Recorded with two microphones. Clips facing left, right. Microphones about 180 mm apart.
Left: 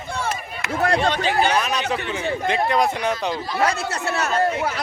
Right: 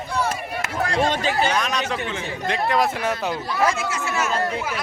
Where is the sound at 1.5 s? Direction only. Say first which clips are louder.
Left 2 dB; 5° left (ahead or behind).